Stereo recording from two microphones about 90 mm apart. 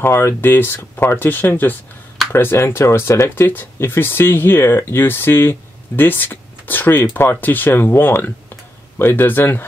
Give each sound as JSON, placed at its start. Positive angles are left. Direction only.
{"t": 0.0, "sound": "speech", "side_deg": 30}